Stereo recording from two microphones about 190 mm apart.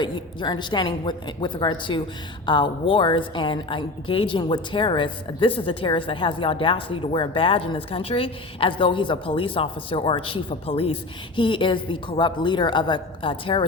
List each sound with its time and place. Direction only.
0.0 s a woman's voice: 25° left (ahead or behind)